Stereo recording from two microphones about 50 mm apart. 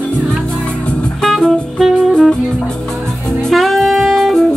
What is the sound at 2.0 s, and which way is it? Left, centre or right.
Music, centre.